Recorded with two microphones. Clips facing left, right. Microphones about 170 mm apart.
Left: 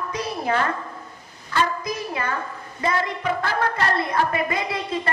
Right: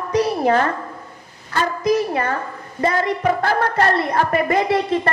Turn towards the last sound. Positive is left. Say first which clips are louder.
# right 7 dB
turn(degrees=-45)  # may be behind; listen again after turning